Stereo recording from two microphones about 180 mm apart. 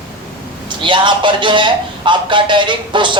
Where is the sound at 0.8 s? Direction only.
25° right (ahead or behind).